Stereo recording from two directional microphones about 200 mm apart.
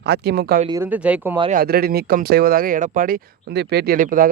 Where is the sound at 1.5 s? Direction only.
50° right (ahead or behind).